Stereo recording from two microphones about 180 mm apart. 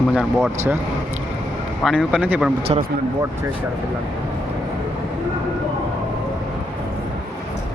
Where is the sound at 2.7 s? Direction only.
30° right (ahead or behind).